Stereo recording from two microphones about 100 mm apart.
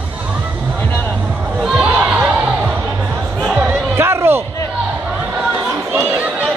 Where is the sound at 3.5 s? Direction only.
25° right (ahead or behind).